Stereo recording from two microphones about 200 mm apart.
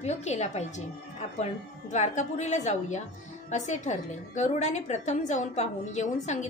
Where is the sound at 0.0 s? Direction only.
35° left (ahead or behind).